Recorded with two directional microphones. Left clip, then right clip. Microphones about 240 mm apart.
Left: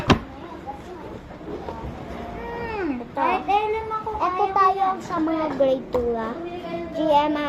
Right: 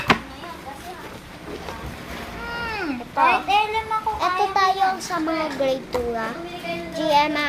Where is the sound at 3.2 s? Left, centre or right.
Right.